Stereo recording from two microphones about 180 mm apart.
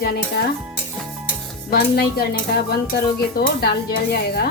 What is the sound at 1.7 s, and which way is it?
Speech, 60° left (ahead or behind).